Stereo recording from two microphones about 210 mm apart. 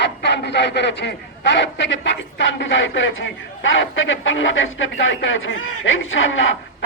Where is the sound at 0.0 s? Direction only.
55° left (ahead or behind).